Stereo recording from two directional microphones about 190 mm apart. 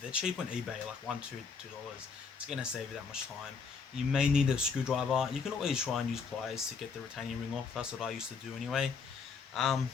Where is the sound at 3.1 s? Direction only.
5° right (ahead or behind).